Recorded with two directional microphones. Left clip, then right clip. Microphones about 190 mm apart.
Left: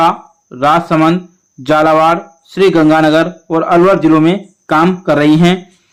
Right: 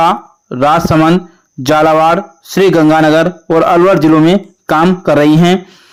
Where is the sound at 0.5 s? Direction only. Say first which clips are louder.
Right 1 dB; 45° right (ahead or behind).